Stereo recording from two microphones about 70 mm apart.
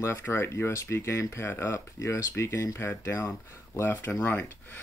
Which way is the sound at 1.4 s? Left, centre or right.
Left.